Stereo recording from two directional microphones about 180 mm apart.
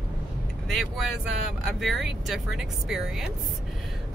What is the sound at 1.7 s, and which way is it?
Speech, centre (ahead or behind).